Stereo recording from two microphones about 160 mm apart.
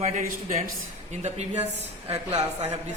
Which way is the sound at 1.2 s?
45° right (ahead or behind).